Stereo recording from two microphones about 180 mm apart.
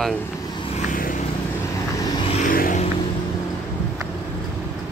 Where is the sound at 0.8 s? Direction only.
50° left (ahead or behind).